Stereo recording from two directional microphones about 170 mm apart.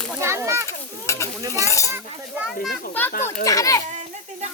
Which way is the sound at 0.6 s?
15° left (ahead or behind).